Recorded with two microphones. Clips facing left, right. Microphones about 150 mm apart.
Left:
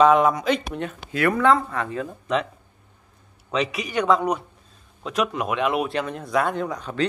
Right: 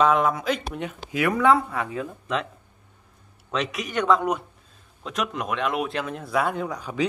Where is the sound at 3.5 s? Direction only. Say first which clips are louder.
Left 2 dB; centre (ahead or behind).